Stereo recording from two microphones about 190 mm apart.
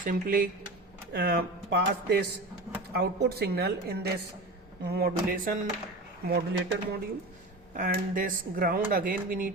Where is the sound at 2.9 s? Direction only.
55° right (ahead or behind).